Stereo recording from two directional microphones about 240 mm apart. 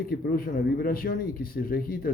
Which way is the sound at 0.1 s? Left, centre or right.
Left.